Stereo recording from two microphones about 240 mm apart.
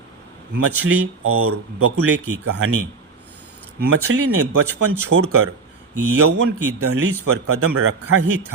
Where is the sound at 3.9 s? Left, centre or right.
Right.